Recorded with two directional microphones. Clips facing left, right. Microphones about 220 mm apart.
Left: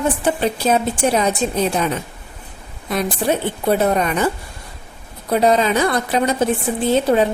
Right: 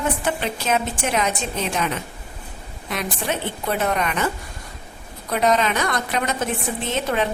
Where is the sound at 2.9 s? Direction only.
35° left (ahead or behind).